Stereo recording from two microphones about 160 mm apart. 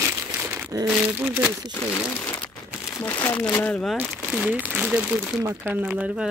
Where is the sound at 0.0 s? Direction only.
15° right (ahead or behind).